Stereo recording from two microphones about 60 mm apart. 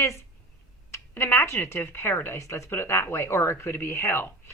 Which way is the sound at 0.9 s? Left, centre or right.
Left.